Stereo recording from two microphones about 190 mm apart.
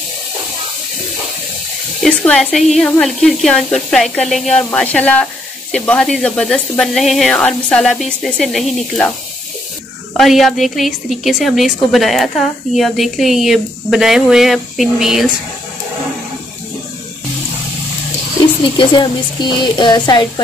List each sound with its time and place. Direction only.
2.0 s speech: 5° left (ahead or behind)
10.1 s speech: centre (ahead or behind)
18.8 s speech: 25° left (ahead or behind)